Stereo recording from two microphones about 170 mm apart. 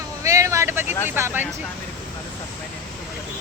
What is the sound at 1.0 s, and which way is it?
Speech, 15° right (ahead or behind).